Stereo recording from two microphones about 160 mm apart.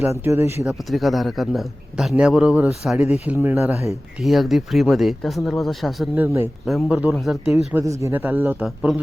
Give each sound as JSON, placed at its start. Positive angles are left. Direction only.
{"t": 0.1, "sound": "speech", "side_deg": -15}
{"t": 0.6, "sound": "a man's voice", "side_deg": 0}
{"t": 3.2, "sound": "speech", "side_deg": -15}
{"t": 4.2, "sound": "a man's voice", "side_deg": 0}
{"t": 6.1, "sound": "speech", "side_deg": -15}
{"t": 6.7, "sound": "a man's voice", "side_deg": 0}
{"t": 7.7, "sound": "a man's voice", "side_deg": -15}